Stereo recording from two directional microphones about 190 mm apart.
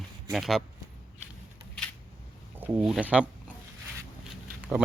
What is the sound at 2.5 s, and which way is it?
Speech, 10° right (ahead or behind).